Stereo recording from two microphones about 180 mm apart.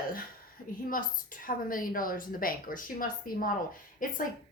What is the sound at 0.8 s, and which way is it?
Speech, 50° left (ahead or behind).